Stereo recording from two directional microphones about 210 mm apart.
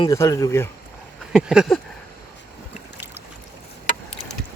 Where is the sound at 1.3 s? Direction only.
5° right (ahead or behind).